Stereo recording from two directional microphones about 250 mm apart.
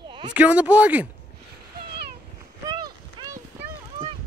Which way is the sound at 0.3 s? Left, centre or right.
Centre.